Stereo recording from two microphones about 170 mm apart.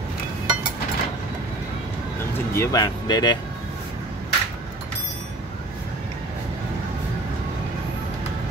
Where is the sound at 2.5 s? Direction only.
20° left (ahead or behind).